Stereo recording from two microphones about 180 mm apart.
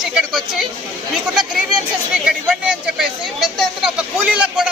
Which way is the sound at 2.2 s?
5° right (ahead or behind).